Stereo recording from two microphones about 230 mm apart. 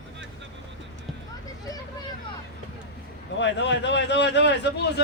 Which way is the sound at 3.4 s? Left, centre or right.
Left.